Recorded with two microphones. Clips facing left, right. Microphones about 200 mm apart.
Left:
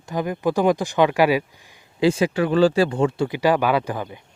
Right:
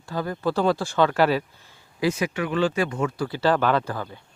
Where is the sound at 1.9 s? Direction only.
30° left (ahead or behind).